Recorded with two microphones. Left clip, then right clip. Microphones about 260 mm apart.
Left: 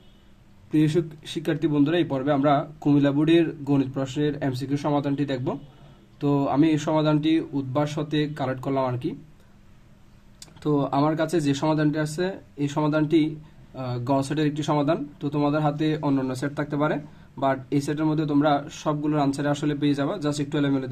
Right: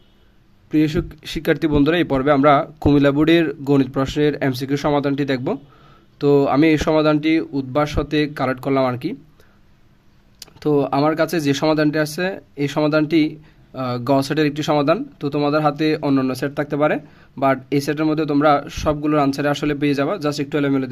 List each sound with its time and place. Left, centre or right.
0.7 s a man's voice: right
10.4 s a man's voice: right